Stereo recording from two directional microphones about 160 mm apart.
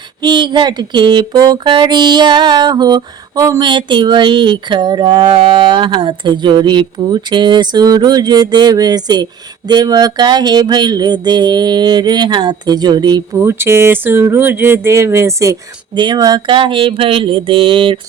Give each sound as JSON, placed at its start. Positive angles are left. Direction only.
{"t": 0.2, "sound": "speech", "side_deg": -30}
{"t": 16.0, "sound": "mantra", "side_deg": -25}